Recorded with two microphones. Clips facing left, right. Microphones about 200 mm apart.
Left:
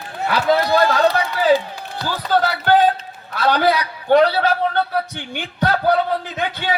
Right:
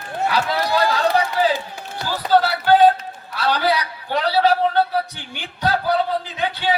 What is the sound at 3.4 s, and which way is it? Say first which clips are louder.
A man's voice: left 3 dB; 50° left (ahead or behind).